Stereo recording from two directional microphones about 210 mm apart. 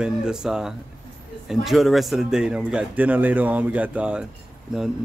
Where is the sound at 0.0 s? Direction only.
5° right (ahead or behind).